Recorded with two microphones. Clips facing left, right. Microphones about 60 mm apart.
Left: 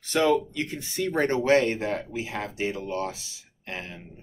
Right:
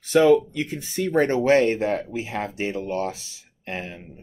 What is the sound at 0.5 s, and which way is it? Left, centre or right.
Speech, right.